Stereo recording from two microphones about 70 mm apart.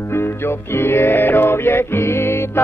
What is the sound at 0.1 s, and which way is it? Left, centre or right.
Music, left.